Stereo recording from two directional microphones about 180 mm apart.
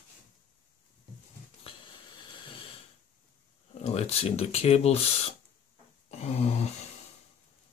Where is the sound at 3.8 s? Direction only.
35° left (ahead or behind).